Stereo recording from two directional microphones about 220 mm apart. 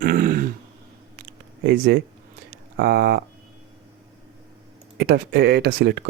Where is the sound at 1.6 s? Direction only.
45° right (ahead or behind).